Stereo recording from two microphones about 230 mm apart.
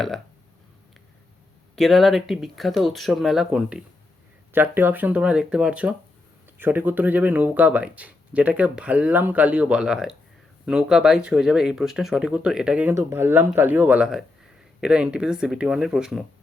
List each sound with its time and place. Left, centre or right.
1.7 s speech: centre